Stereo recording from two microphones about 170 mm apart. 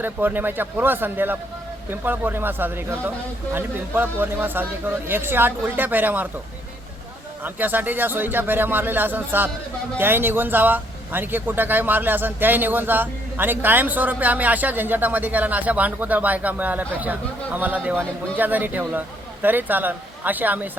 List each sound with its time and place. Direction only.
0.0 s speech: 10° right (ahead or behind)
7.4 s speech: 10° right (ahead or behind)